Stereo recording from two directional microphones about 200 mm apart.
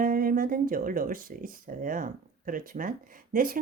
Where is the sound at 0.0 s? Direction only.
45° right (ahead or behind).